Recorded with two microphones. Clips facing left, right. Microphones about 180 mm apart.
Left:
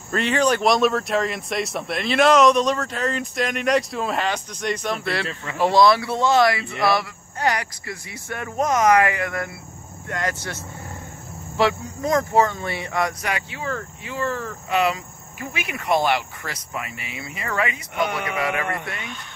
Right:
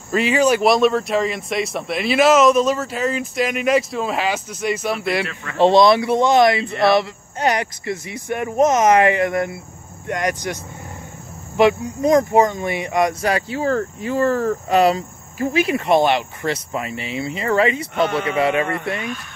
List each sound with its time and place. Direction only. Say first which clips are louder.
0.1 s speech: right 4 dB; 5° right (ahead or behind)
13.2 s speech: right 8 dB; 35° right (ahead or behind)